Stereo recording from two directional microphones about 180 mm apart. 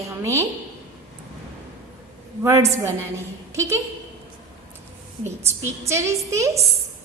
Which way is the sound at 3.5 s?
15° right (ahead or behind).